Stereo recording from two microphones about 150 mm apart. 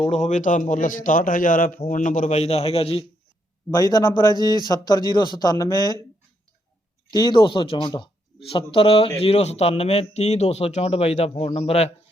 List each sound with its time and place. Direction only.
0.0 s a man's voice: 50° left (ahead or behind)
3.8 s a man's voice: 25° left (ahead or behind)
7.1 s speech: 30° left (ahead or behind)